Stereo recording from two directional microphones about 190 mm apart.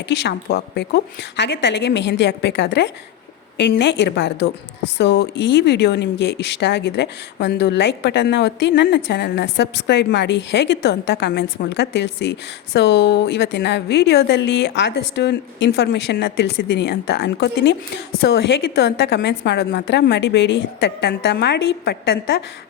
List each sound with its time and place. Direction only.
0.1 s speech: 65° left (ahead or behind)